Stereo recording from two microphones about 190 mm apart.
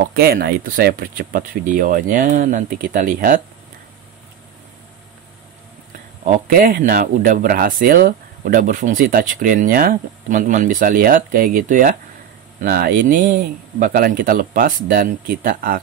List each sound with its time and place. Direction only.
0.0 s speech: 55° right (ahead or behind)
6.2 s speech: 45° right (ahead or behind)